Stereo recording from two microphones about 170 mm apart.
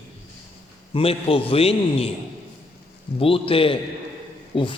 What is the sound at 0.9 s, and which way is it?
A man's voice, 35° left (ahead or behind).